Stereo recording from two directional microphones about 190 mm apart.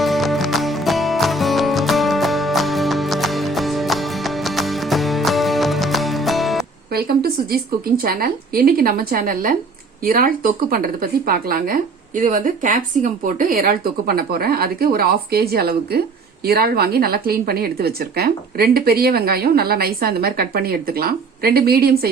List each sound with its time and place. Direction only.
0.0 s music: centre (ahead or behind)
6.9 s speech: 55° right (ahead or behind)